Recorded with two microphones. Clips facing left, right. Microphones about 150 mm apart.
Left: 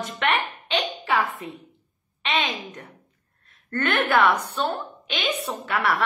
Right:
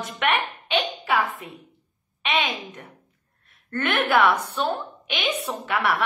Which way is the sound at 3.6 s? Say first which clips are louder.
Even; 10° right (ahead or behind).